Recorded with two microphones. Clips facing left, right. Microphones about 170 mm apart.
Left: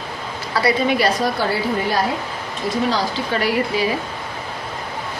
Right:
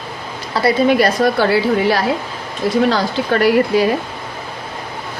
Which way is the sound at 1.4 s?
75° right (ahead or behind).